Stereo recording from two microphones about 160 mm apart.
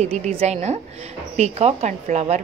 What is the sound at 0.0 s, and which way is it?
A woman's voice, 40° right (ahead or behind).